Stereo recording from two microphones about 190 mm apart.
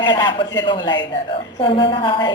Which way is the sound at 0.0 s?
25° left (ahead or behind).